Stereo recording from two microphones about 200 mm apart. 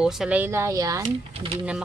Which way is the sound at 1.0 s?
30° right (ahead or behind).